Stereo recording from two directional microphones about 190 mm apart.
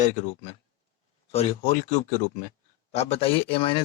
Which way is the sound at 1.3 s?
30° left (ahead or behind).